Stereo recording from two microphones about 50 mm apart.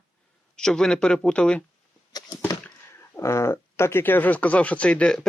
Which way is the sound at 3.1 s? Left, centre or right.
Left.